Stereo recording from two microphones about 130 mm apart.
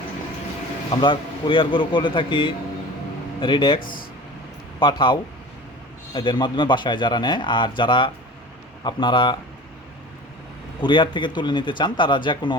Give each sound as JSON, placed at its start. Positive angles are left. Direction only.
{"t": 0.9, "sound": "speech", "side_deg": 40}
{"t": 3.8, "sound": "speech", "side_deg": 90}
{"t": 4.8, "sound": "speech", "side_deg": 40}
{"t": 6.1, "sound": "speech", "side_deg": 35}
{"t": 10.8, "sound": "speech", "side_deg": 35}